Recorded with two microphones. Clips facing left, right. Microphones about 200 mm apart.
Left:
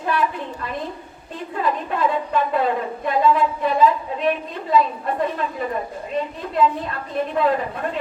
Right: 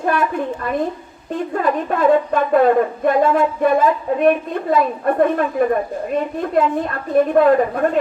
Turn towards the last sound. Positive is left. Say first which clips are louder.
# right 8 dB
turn(degrees=-50)  # may be behind; listen again after turning